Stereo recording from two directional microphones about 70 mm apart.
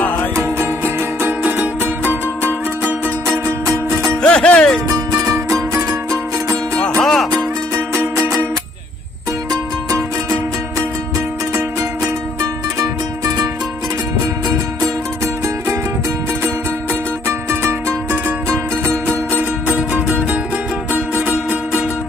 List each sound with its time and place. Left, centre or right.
0.4 s music: right
3.7 s music: right
4.2 s music: centre
5.2 s music: right
7.0 s music: centre
7.7 s music: right
9.5 s music: right
17.3 s music: right
19.3 s music: left
20.9 s music: right